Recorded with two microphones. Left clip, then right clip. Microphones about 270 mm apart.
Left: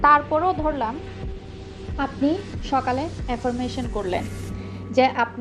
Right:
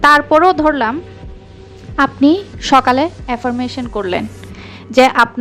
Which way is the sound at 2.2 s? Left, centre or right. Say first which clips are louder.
Right 11 dB; right.